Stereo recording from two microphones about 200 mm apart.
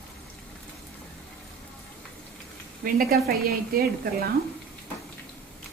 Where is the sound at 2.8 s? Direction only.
50° right (ahead or behind).